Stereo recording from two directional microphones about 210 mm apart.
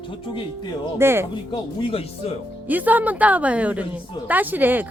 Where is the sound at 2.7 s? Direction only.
10° right (ahead or behind).